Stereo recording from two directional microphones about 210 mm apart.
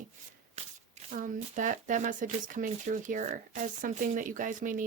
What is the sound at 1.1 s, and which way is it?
Speech, 40° right (ahead or behind).